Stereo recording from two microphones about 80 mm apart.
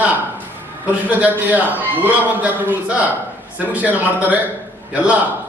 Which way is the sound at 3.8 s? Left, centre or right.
Right.